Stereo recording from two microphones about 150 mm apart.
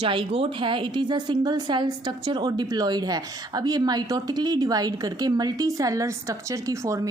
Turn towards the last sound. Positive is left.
turn(degrees=-20)  # may be behind; listen again after turning